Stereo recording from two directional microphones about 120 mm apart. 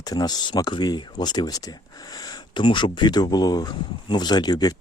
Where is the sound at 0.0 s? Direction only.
35° left (ahead or behind).